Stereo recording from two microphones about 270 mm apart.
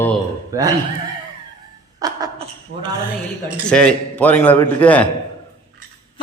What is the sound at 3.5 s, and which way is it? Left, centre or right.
A man's voice, centre.